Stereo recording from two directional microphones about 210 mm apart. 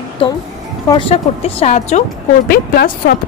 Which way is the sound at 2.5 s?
45° left (ahead or behind).